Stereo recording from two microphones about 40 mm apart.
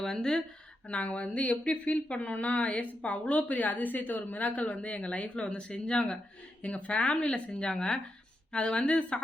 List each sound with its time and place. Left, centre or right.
0.0 s speech: centre
0.9 s a woman's voice: left
6.6 s a woman's voice: left